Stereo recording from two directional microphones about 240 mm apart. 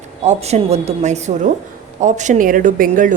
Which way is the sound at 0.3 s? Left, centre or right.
Right.